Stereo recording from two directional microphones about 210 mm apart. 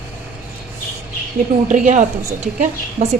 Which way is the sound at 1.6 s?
35° right (ahead or behind).